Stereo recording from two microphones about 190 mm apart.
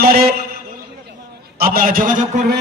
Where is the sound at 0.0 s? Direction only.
55° right (ahead or behind).